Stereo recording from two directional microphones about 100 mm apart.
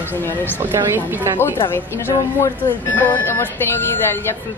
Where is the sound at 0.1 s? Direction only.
20° left (ahead or behind).